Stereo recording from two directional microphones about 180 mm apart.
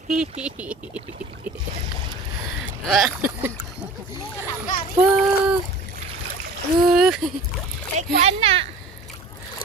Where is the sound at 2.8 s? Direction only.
Centre (ahead or behind).